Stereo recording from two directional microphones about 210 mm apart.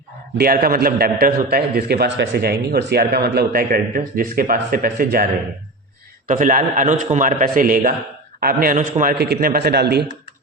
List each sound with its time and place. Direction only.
0.3 s a man's voice: 45° right (ahead or behind)